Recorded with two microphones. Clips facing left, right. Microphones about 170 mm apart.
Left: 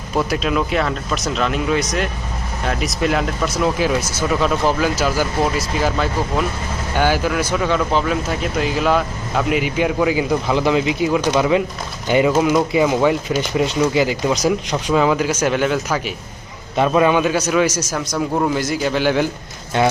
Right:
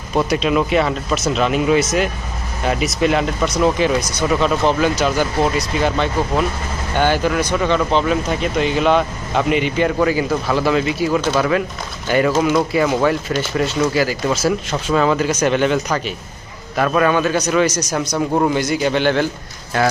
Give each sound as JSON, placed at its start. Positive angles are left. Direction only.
{"t": 0.2, "sound": "speech", "side_deg": 0}
{"t": 16.7, "sound": "speech", "side_deg": 20}
{"t": 19.7, "sound": "speech", "side_deg": 25}